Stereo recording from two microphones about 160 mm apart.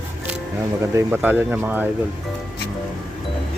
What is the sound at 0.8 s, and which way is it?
Speech, 15° right (ahead or behind).